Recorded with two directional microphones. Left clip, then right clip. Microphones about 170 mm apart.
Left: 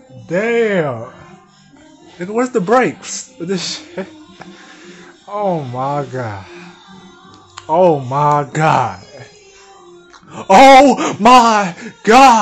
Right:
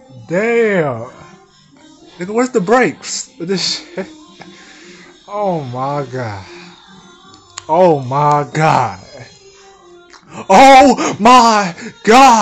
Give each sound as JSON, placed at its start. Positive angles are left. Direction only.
{"t": 0.3, "sound": "speech", "side_deg": -25}
{"t": 2.1, "sound": "speech", "side_deg": -15}
{"t": 10.3, "sound": "speech", "side_deg": -10}